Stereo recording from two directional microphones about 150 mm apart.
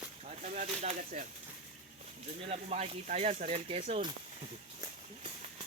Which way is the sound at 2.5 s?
45° right (ahead or behind).